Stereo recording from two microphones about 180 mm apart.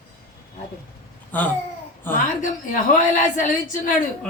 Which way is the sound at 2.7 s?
45° left (ahead or behind).